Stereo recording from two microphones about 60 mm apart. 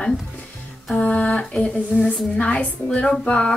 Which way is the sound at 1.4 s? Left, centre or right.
Centre.